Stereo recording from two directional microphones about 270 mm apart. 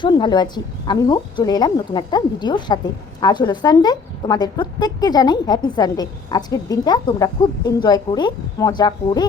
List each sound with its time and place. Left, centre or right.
0.0 s a woman's voice: centre